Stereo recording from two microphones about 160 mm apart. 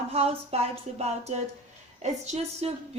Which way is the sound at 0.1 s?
40° right (ahead or behind).